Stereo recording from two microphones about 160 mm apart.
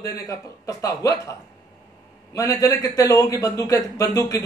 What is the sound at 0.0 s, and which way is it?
A man's voice, 20° left (ahead or behind).